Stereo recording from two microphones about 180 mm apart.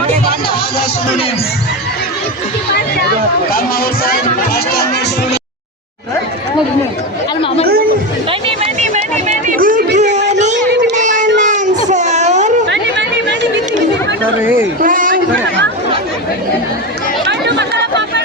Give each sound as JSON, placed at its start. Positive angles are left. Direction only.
{"t": 4.0, "sound": "speech", "side_deg": 60}
{"t": 8.3, "sound": "chatter", "side_deg": -30}
{"t": 10.7, "sound": "music", "side_deg": -70}
{"t": 10.9, "sound": "a sound", "side_deg": -45}
{"t": 11.3, "sound": "baby cry", "side_deg": -45}
{"t": 12.6, "sound": "chatter", "side_deg": -80}
{"t": 14.8, "sound": "a sound", "side_deg": -50}
{"t": 17.2, "sound": "chatter", "side_deg": -70}